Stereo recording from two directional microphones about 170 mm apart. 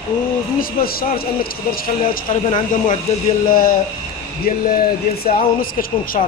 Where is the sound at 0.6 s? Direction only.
60° left (ahead or behind).